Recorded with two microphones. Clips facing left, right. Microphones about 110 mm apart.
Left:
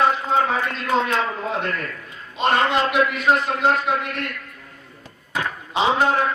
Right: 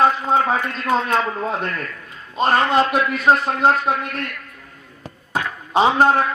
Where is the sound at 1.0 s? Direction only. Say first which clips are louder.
Right 2 dB; 40° right (ahead or behind).